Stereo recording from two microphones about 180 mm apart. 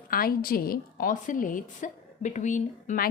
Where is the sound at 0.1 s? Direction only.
55° left (ahead or behind).